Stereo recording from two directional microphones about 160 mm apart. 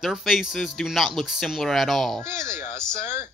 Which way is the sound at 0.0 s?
Centre (ahead or behind).